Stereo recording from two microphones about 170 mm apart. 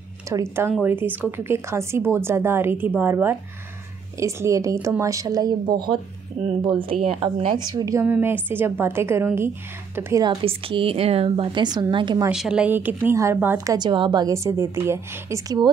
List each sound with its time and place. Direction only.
0.3 s a woman's voice: 15° right (ahead or behind)
10.2 s a woman's voice: 35° right (ahead or behind)
12.3 s a woman's voice: 5° right (ahead or behind)
13.7 s a woman's voice: 30° right (ahead or behind)